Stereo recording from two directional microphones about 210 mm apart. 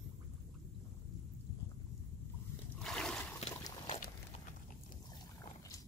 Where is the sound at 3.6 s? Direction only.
25° left (ahead or behind).